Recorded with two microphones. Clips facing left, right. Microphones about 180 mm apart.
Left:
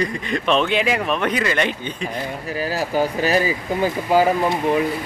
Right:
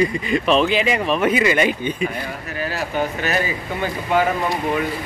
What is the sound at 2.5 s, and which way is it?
Speech, 35° left (ahead or behind).